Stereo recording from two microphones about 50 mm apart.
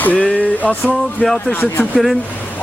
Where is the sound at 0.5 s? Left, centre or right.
Left.